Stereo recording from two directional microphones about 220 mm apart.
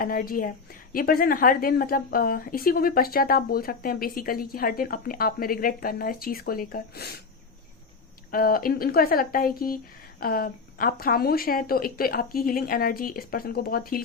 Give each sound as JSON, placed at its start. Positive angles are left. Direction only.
{"t": 0.0, "sound": "a woman's voice", "side_deg": 40}
{"t": 8.3, "sound": "a woman's voice", "side_deg": 40}